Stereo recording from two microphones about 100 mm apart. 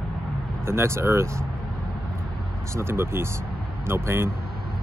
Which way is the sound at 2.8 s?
25° right (ahead or behind).